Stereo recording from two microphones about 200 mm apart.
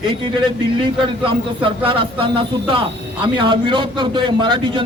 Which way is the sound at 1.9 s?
25° right (ahead or behind).